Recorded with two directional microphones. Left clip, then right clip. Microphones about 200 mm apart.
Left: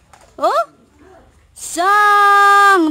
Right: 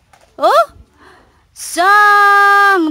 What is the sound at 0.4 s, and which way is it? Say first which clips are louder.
Speech: right 5 dB; 30° right (ahead or behind).